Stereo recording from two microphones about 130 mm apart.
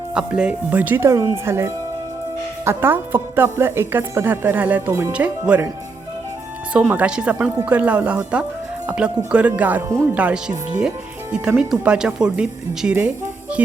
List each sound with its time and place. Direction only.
0.1 s a woman's voice: 5° right (ahead or behind)
5.5 s a woman's voice: 5° right (ahead or behind)
6.7 s a woman's voice: 10° right (ahead or behind)